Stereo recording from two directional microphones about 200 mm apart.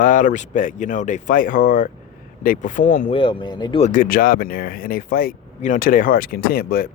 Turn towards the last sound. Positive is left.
turn(degrees=50)  # may be behind; listen again after turning